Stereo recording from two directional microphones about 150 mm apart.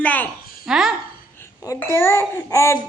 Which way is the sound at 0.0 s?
10° left (ahead or behind).